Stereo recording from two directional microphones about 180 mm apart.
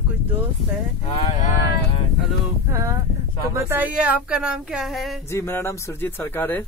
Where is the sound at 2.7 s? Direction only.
15° right (ahead or behind).